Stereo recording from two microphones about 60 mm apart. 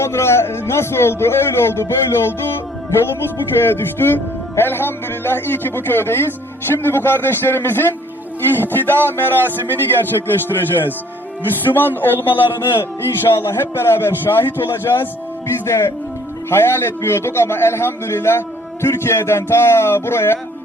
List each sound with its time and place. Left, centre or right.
0.0 s a man's voice: left
3.3 s a man's voice: left